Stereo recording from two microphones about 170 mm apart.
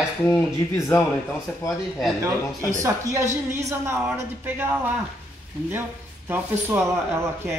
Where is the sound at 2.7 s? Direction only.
20° right (ahead or behind).